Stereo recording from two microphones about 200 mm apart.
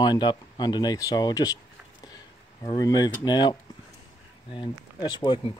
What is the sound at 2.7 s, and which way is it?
Speech, 20° left (ahead or behind).